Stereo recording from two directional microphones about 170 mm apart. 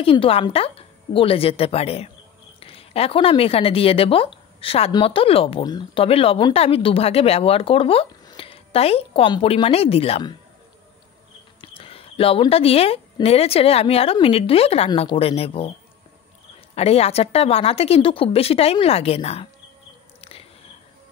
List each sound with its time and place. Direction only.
0.0 s a woman's voice: 35° left (ahead or behind)
11.6 s speech: 35° left (ahead or behind)
16.7 s speech: 35° left (ahead or behind)
20.2 s a sound: 35° left (ahead or behind)